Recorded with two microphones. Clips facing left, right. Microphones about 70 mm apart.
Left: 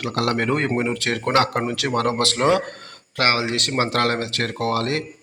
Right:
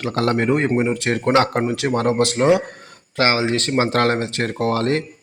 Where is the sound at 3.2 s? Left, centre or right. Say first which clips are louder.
Right 3 dB; right.